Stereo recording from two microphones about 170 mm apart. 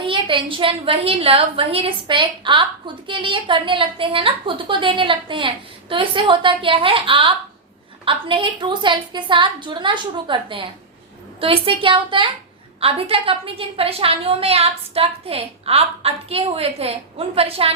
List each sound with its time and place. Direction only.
0.0 s a woman's voice: 30° right (ahead or behind)